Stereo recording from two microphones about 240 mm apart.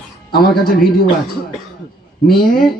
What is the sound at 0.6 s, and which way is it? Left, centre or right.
Speech, left.